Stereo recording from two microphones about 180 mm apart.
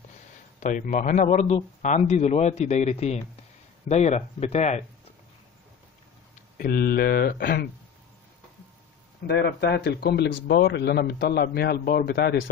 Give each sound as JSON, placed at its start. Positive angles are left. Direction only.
{"t": 0.6, "sound": "speech", "side_deg": 45}
{"t": 6.6, "sound": "speech", "side_deg": 55}
{"t": 9.3, "sound": "speech", "side_deg": 65}